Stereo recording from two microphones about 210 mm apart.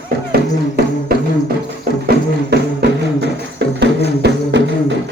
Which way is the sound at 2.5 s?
50° right (ahead or behind).